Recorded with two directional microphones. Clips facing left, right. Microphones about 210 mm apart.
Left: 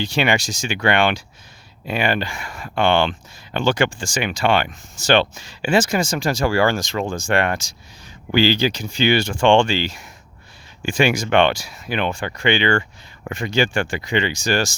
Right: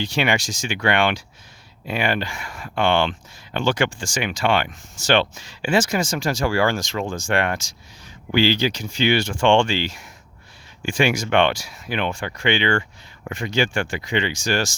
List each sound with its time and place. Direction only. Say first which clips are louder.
0.0 s speech: left 2 dB; 30° left (ahead or behind)